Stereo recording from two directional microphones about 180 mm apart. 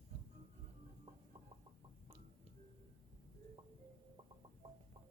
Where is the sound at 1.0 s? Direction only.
30° right (ahead or behind).